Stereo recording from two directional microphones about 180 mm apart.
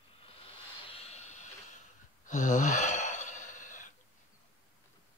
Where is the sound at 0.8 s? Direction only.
35° left (ahead or behind).